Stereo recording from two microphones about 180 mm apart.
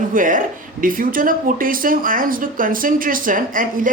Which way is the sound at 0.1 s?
50° right (ahead or behind).